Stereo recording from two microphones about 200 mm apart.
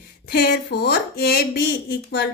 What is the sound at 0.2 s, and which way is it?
A woman's voice, 50° left (ahead or behind).